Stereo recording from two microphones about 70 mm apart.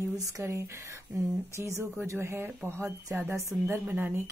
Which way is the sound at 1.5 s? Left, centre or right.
Right.